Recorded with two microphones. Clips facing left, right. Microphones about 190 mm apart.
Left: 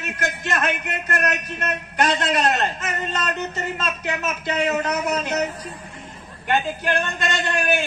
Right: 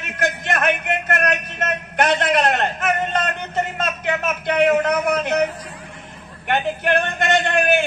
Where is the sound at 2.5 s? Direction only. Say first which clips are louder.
Right 3 dB; 55° right (ahead or behind).